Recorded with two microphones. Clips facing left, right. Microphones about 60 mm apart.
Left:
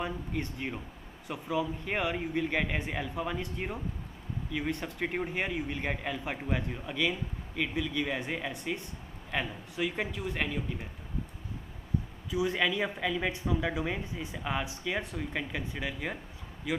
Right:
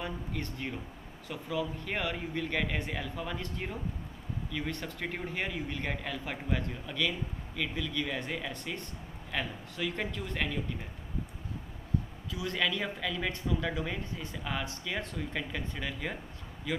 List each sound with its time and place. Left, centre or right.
0.0 s a man's voice: centre
12.3 s a man's voice: centre